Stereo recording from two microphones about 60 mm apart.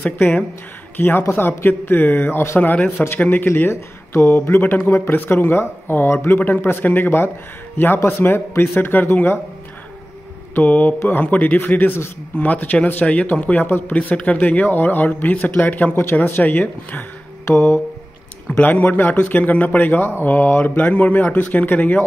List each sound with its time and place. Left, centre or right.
0.0 s a man's voice: left
10.5 s a man's voice: left
13.7 s a man's voice: left
13.9 s a man's voice: left
18.6 s a man's voice: left